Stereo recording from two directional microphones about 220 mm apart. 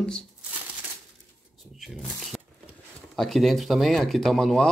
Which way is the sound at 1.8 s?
Centre (ahead or behind).